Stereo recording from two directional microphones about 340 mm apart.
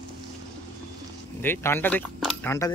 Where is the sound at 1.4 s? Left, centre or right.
Centre.